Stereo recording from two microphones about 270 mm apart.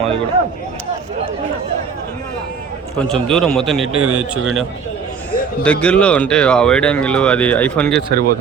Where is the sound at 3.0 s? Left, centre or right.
Centre.